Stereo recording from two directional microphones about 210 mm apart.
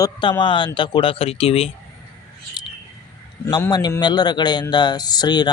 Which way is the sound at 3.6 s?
15° left (ahead or behind).